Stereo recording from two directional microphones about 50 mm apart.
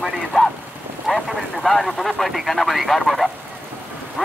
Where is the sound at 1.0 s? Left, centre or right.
Centre.